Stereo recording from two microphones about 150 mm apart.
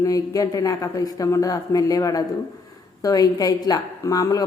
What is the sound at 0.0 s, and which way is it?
A woman's voice, 25° left (ahead or behind).